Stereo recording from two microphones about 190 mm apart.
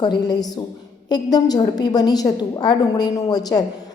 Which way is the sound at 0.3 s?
20° left (ahead or behind).